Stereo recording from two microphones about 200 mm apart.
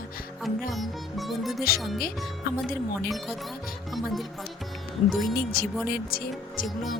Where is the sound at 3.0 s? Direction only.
Centre (ahead or behind).